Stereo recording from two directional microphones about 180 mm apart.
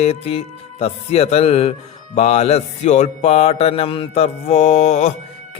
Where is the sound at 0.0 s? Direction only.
35° left (ahead or behind).